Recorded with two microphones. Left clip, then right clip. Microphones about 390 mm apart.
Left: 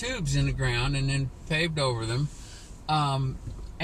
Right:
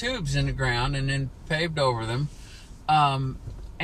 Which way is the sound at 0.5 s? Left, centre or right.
Right.